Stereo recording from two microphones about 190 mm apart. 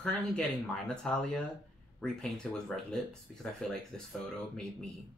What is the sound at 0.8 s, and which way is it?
Speech, 5° left (ahead or behind).